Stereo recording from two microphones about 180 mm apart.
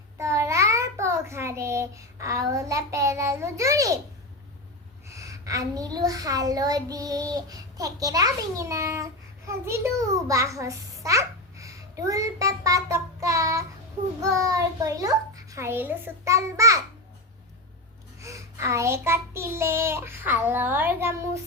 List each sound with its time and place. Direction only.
0.2 s a child's voice: 15° right (ahead or behind)
5.0 s a child's voice: 15° right (ahead or behind)
14.2 s child singing: 15° right (ahead or behind)
18.2 s child singing: 15° right (ahead or behind)